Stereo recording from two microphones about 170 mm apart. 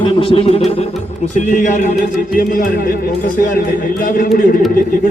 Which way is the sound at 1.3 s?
50° left (ahead or behind).